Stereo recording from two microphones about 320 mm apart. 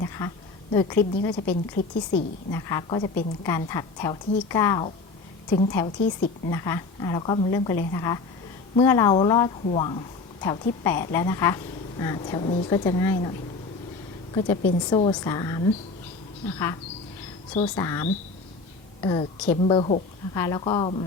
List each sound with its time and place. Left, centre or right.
0.7 s a woman's voice: centre
1.4 s a woman's voice: left
2.5 s a woman's voice: centre
14.3 s a woman's voice: centre
17.7 s a woman's voice: centre